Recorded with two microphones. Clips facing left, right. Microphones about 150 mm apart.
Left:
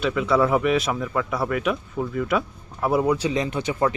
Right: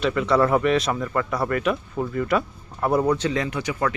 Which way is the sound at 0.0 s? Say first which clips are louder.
Right 1 dB; centre (ahead or behind).